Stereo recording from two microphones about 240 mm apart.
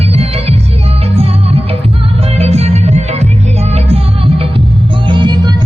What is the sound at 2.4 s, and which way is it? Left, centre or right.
Music, right.